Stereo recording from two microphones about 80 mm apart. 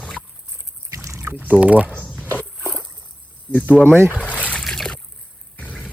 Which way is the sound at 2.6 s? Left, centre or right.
Right.